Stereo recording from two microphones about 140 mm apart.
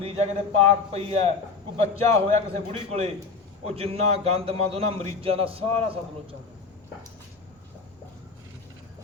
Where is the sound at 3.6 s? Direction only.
45° right (ahead or behind).